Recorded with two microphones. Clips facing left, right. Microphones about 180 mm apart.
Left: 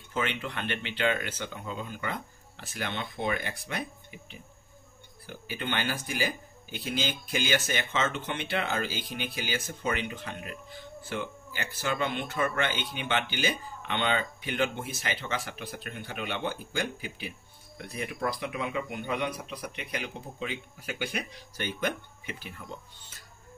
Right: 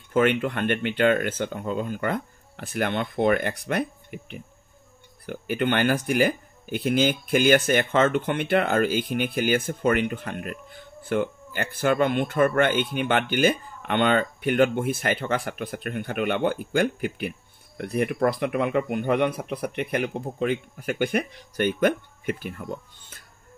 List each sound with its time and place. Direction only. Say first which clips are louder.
0.1 s speech: right 11 dB; 55° right (ahead or behind)